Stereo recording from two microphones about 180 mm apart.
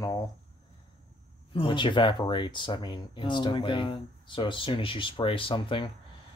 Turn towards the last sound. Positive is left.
turn(degrees=30)  # may be behind; listen again after turning